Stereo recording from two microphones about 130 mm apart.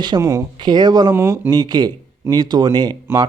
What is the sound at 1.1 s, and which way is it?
Speech, 20° right (ahead or behind).